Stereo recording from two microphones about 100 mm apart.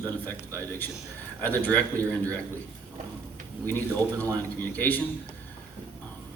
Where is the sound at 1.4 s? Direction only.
20° left (ahead or behind).